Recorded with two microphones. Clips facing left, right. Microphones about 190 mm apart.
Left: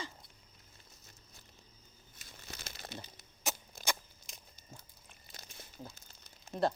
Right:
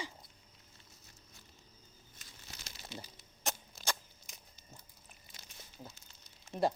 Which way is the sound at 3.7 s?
50° left (ahead or behind).